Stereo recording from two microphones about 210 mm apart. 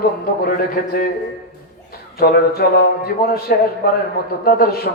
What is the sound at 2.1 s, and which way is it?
A man's voice, 45° left (ahead or behind).